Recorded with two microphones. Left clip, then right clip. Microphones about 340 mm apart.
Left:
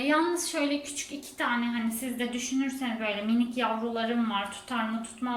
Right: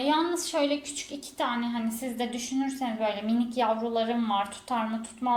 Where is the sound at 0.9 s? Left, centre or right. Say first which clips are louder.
Right 2 dB; centre.